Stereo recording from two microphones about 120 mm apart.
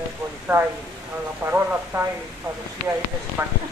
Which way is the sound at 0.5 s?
15° right (ahead or behind).